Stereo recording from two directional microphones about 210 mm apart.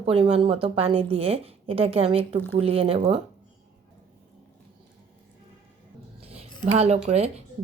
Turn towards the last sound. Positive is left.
turn(degrees=-30)  # may be behind; listen again after turning